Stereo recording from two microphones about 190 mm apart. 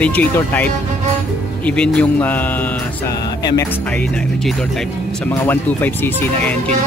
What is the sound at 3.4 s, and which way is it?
Speech, 20° left (ahead or behind).